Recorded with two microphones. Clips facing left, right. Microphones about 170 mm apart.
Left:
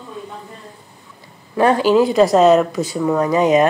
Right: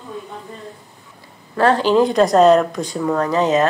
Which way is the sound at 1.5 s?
10° left (ahead or behind).